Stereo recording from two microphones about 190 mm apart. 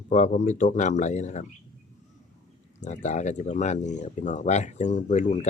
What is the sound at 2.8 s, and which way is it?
Speech, 40° left (ahead or behind).